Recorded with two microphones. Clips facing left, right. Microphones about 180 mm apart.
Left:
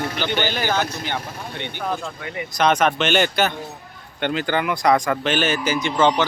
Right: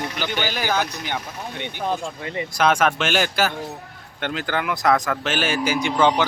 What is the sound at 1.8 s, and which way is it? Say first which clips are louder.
Speech: right 2 dB; 25° right (ahead or behind).